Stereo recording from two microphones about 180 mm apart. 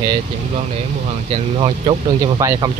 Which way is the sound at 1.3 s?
30° right (ahead or behind).